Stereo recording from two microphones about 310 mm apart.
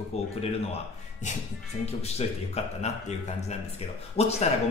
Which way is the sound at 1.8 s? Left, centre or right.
Left.